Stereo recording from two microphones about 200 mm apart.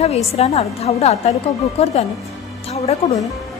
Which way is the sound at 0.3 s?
30° left (ahead or behind).